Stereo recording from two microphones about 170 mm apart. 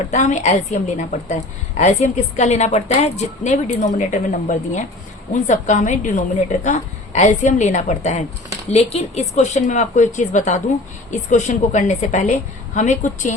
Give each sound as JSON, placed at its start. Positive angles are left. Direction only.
{"t": 0.1, "sound": "a woman's voice", "side_deg": 45}